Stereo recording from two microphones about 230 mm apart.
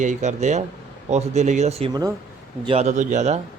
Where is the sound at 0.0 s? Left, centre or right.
Right.